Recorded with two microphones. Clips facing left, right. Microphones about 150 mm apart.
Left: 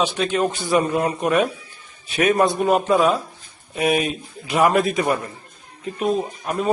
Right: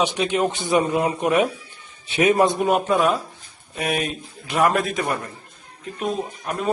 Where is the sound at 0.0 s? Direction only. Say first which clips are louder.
Even; 20° right (ahead or behind).